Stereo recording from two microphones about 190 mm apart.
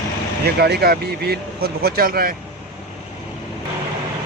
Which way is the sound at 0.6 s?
55° right (ahead or behind).